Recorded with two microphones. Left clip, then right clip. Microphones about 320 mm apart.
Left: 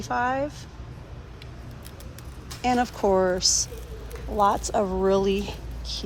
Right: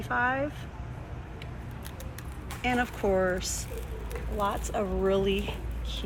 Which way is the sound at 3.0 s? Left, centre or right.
Left.